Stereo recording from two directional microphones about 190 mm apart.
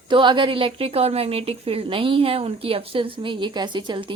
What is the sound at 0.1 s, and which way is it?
Speech, 25° right (ahead or behind).